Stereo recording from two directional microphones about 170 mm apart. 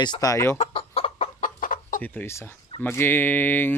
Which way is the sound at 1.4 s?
50° left (ahead or behind).